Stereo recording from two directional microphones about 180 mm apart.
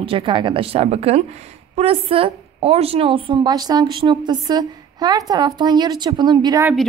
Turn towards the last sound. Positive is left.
turn(degrees=-20)  # may be behind; listen again after turning